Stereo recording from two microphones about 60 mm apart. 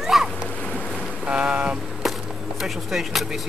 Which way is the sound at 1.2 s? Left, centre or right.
Centre.